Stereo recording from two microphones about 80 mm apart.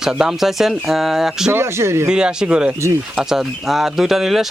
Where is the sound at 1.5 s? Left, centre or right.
Right.